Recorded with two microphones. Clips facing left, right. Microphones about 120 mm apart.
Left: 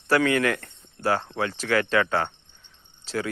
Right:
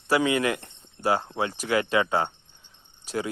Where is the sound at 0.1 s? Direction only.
15° right (ahead or behind).